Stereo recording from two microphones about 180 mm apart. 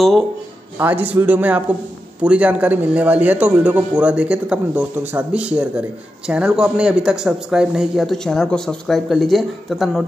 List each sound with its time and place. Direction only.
0.7 s a man's voice: 10° right (ahead or behind)